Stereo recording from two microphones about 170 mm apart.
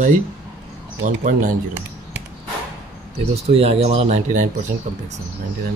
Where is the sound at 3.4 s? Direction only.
35° right (ahead or behind).